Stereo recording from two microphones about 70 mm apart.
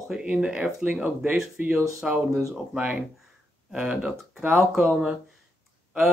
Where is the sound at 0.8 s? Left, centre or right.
Right.